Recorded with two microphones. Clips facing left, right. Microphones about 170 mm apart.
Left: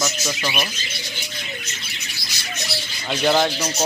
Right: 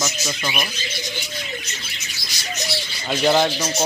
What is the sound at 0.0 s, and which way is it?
Speech, 5° left (ahead or behind).